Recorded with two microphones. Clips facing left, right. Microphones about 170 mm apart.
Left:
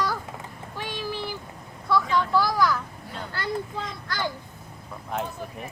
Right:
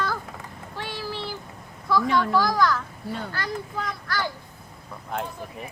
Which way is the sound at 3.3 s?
25° left (ahead or behind).